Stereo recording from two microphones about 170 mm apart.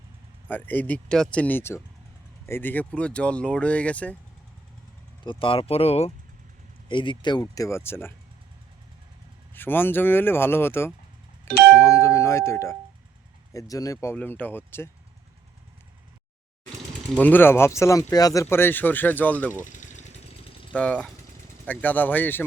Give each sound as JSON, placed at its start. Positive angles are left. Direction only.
{"t": 0.4, "sound": "speech", "side_deg": 10}
{"t": 5.2, "sound": "speech", "side_deg": 30}
{"t": 9.6, "sound": "speech", "side_deg": 10}
{"t": 17.2, "sound": "speech", "side_deg": 10}
{"t": 19.6, "sound": "a sound", "side_deg": 45}
{"t": 20.7, "sound": "speech", "side_deg": 5}